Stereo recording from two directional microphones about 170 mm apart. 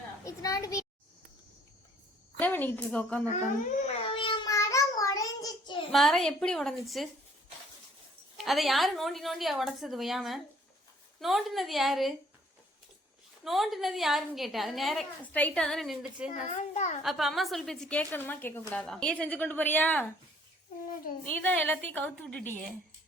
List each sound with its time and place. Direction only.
0.3 s a sound: 20° left (ahead or behind)
2.4 s a woman's voice: 10° left (ahead or behind)
3.8 s a sound: 35° left (ahead or behind)
4.5 s child singing: 20° left (ahead or behind)
5.9 s a woman's voice: centre (ahead or behind)
8.4 s a woman's voice: centre (ahead or behind)
13.4 s a woman's voice: centre (ahead or behind)
16.3 s a child's voice: 45° left (ahead or behind)
17.0 s a woman's voice: centre (ahead or behind)
21.2 s a woman's voice: 10° left (ahead or behind)